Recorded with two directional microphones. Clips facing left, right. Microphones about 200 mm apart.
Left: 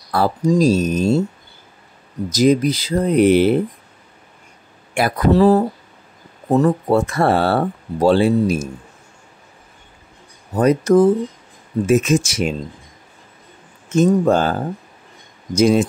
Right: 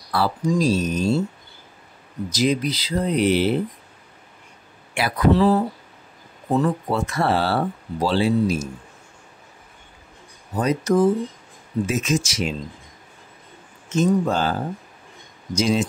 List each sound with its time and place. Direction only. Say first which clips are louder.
0.1 s speech: left 5 dB; 45° left (ahead or behind)
2.2 s speech: left 7 dB; 45° left (ahead or behind)
4.9 s speech: left 3 dB; 45° left (ahead or behind)
10.6 s speech: left 6 dB; 55° left (ahead or behind)
13.8 s speech: left 5 dB; 50° left (ahead or behind)